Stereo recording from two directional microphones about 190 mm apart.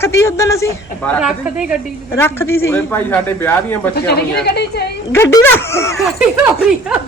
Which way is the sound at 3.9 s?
60° left (ahead or behind).